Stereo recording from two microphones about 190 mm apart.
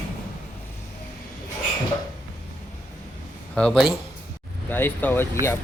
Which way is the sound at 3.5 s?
5° left (ahead or behind).